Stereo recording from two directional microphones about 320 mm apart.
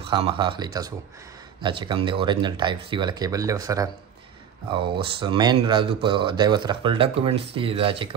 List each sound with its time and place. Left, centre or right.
0.1 s speech: centre